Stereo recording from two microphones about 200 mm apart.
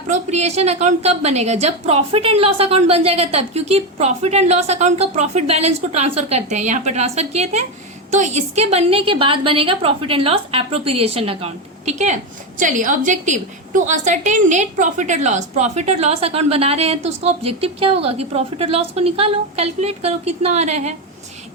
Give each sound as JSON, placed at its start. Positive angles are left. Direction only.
{"t": 0.1, "sound": "a woman's voice", "side_deg": -35}